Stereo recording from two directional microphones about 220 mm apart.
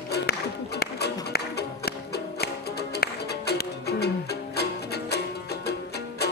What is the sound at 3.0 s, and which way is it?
Music, 45° left (ahead or behind).